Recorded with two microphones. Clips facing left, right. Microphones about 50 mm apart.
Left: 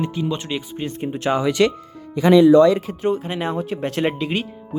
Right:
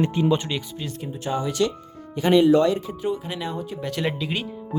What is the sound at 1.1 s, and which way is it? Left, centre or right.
Speech, left.